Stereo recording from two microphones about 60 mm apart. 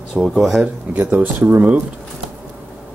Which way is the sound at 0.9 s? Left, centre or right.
Right.